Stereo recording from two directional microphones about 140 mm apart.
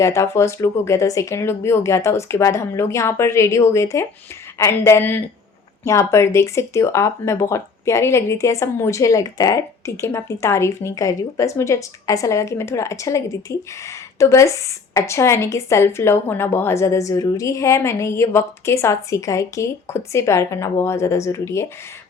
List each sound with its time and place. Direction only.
0.0 s speech: 20° left (ahead or behind)